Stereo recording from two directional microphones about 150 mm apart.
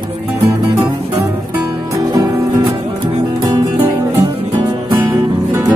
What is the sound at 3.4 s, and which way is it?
Music, 25° right (ahead or behind).